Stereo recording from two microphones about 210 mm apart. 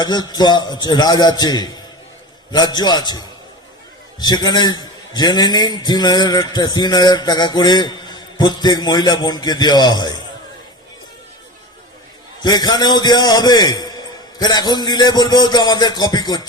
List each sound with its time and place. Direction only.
0.0 s a man's voice: 20° left (ahead or behind)
12.4 s a man's voice: 20° left (ahead or behind)